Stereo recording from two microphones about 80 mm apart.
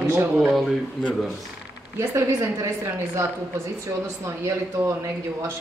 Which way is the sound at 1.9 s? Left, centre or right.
Right.